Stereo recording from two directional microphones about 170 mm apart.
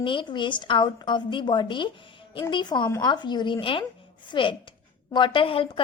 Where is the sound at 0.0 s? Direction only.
30° left (ahead or behind).